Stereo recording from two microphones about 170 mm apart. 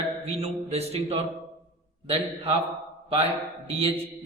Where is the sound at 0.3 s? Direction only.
35° right (ahead or behind).